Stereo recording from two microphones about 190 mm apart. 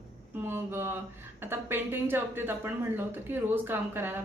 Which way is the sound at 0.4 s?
10° right (ahead or behind).